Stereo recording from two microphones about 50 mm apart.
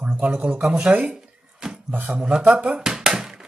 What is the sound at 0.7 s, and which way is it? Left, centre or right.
Speech, right.